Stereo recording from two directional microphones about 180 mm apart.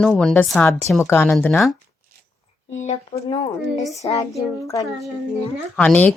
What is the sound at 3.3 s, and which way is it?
Speech, 25° left (ahead or behind).